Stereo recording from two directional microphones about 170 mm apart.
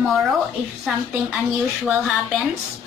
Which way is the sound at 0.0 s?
Centre (ahead or behind).